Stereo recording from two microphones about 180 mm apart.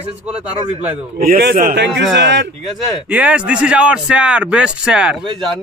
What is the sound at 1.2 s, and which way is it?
Speech, 55° right (ahead or behind).